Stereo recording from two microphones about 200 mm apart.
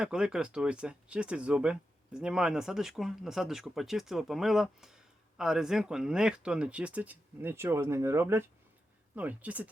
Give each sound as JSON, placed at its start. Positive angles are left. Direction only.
{"t": 0.0, "sound": "speech", "side_deg": -5}